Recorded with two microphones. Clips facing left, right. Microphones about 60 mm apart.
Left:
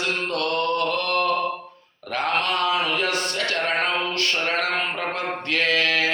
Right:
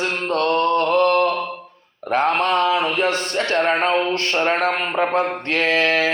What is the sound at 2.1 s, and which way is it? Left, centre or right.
Speech, right.